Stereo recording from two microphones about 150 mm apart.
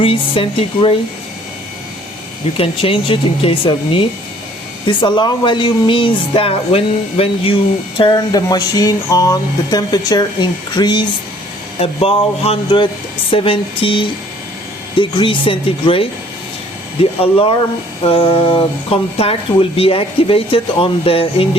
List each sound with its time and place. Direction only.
0.0 s speech: 40° left (ahead or behind)
2.6 s speech: 40° left (ahead or behind)
11.8 s speech: 40° left (ahead or behind)